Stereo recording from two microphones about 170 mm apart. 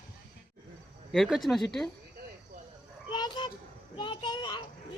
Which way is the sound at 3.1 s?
25° left (ahead or behind).